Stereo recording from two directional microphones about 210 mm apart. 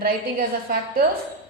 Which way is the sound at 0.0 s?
45° right (ahead or behind).